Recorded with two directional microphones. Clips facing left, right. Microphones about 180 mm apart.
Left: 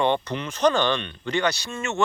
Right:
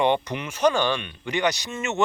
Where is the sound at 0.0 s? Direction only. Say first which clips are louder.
Right 1 dB; 15° right (ahead or behind).